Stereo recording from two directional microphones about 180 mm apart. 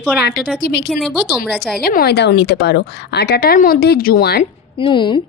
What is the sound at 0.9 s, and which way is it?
Speech, centre (ahead or behind).